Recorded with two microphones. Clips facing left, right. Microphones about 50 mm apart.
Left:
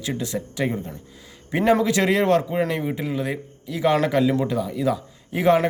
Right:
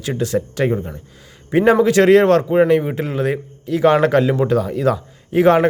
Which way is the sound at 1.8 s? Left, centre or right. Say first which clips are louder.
Right 8 dB; right.